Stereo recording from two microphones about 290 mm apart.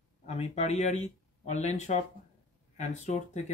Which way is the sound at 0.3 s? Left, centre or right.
Left.